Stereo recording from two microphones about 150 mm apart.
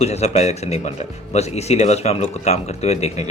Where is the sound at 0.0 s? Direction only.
45° left (ahead or behind).